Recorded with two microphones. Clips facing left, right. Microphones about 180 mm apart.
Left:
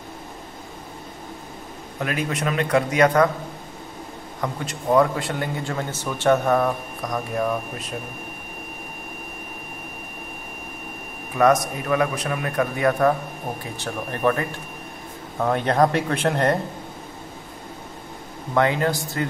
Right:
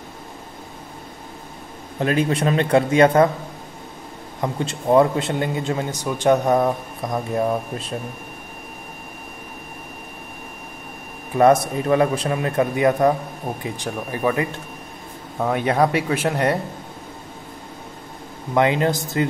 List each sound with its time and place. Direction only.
2.0 s speech: 30° right (ahead or behind)
4.4 s speech: 25° right (ahead or behind)
11.3 s speech: 30° right (ahead or behind); by 16.5 s 10° right (ahead or behind)
18.5 s speech: 20° right (ahead or behind)